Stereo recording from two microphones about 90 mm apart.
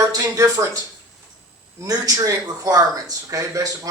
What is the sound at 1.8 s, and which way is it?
Speech, 40° right (ahead or behind).